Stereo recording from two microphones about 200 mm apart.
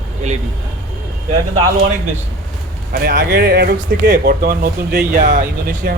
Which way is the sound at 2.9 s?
50° right (ahead or behind).